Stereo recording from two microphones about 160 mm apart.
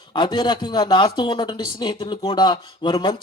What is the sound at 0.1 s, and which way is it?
Speech, 30° left (ahead or behind).